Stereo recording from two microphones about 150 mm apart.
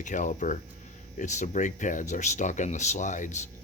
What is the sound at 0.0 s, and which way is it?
Speech, 55° left (ahead or behind).